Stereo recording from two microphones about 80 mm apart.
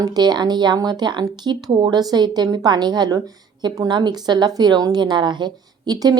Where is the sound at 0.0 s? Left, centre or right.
Right.